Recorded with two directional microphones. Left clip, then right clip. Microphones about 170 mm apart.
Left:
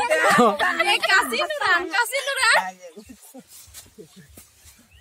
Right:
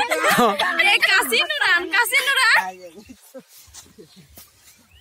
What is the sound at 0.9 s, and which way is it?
Speech, 35° left (ahead or behind).